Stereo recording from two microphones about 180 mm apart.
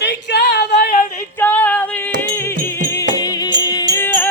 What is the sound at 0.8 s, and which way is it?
Female singing, 55° left (ahead or behind).